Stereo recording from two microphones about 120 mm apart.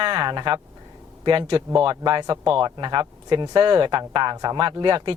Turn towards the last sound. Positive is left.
turn(degrees=-40)  # may be behind; listen again after turning